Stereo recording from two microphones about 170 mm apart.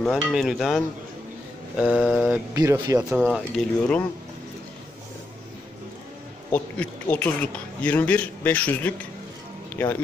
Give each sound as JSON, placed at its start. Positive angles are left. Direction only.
{"t": 0.0, "sound": "speech", "side_deg": 0}
{"t": 2.5, "sound": "speech", "side_deg": -20}
{"t": 3.0, "sound": "speech", "side_deg": 0}
{"t": 6.5, "sound": "a man's voice", "side_deg": 10}